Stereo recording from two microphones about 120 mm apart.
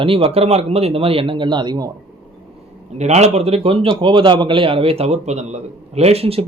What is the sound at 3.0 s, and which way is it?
A man's voice, 65° right (ahead or behind).